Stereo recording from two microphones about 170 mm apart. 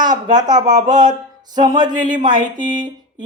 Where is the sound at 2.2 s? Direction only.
25° right (ahead or behind).